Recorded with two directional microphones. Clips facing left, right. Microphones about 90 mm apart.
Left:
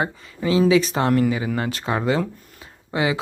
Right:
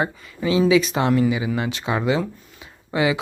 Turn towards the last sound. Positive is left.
turn(degrees=30)  # may be behind; listen again after turning